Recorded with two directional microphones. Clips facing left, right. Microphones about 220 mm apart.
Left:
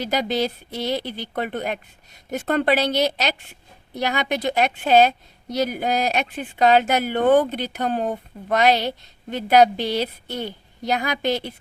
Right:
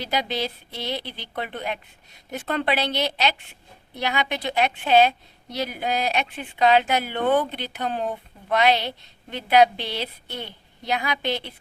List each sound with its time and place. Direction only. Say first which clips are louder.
0.0 s a woman's voice: left 4 dB; 45° left (ahead or behind)